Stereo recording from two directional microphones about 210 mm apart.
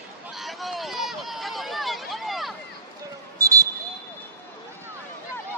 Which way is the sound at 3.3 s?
15° right (ahead or behind).